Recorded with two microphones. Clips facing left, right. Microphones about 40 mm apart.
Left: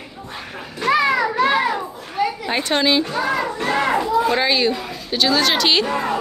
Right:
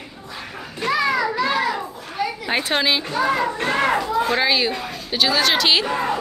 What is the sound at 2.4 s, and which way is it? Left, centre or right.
Speech, centre.